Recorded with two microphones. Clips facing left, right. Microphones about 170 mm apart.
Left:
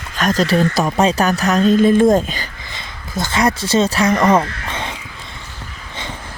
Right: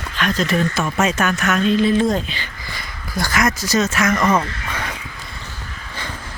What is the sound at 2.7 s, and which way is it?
Speech, 20° left (ahead or behind).